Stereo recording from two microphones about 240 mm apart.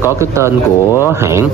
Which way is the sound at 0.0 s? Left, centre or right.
Centre.